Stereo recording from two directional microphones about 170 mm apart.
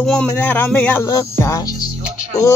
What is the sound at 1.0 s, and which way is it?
Music, 20° left (ahead or behind).